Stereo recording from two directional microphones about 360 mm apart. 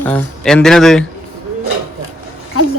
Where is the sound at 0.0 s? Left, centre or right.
Centre.